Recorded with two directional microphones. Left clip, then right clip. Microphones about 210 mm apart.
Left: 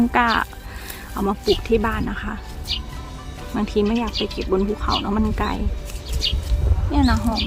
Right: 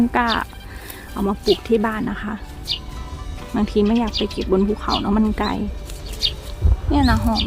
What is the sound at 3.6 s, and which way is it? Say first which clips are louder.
Speech: right 2 dB; 25° right (ahead or behind).